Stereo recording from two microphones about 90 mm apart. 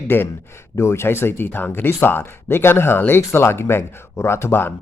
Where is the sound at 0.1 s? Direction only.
25° left (ahead or behind).